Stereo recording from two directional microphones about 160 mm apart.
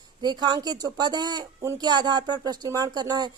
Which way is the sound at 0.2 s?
25° right (ahead or behind).